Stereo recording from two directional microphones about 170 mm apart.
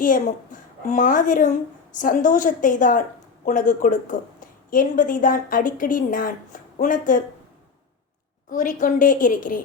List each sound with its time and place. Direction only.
0.0 s a woman's voice: 50° left (ahead or behind)
8.4 s a woman's voice: 50° left (ahead or behind)